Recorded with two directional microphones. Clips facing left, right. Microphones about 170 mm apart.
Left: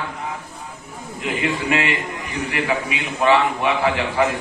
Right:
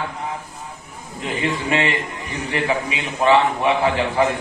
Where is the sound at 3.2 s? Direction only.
30° right (ahead or behind).